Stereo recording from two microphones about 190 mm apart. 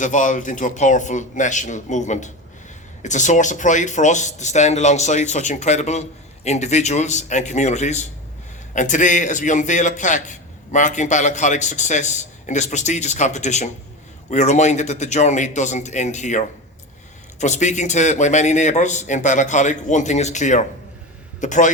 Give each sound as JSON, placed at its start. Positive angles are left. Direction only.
{"t": 0.0, "sound": "speech", "side_deg": 40}
{"t": 17.4, "sound": "speech", "side_deg": 40}